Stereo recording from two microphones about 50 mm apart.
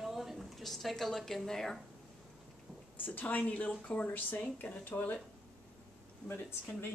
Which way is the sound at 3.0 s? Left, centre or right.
Left.